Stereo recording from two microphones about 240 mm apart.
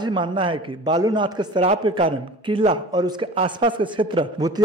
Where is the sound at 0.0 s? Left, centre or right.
Centre.